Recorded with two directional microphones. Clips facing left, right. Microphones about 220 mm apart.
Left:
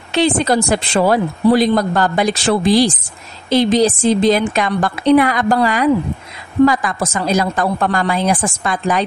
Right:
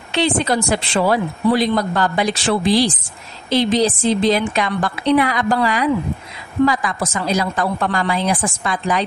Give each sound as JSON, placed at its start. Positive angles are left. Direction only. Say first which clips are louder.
{"t": 0.1, "sound": "a woman's voice", "louder": "left 3 dB", "side_deg": 40}